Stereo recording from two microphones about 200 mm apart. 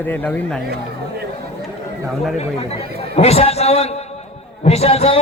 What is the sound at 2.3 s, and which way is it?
A man's voice, 30° left (ahead or behind).